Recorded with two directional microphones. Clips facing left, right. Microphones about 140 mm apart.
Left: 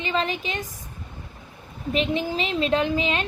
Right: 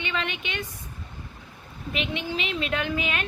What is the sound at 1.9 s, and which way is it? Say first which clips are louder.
A woman's voice: left 6 dB; 35° left (ahead or behind).